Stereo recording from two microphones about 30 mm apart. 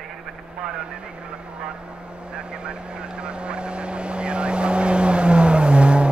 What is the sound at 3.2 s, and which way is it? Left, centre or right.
Vehicle, right.